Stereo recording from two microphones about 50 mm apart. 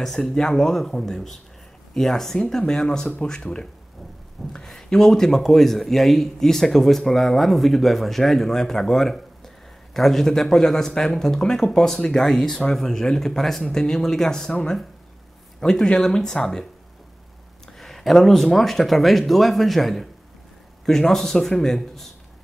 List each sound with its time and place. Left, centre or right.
0.0 s a man's voice: centre
17.7 s a man's voice: centre